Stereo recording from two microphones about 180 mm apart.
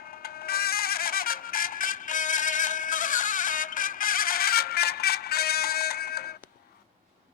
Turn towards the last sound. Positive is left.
turn(degrees=60)  # may be behind; listen again after turning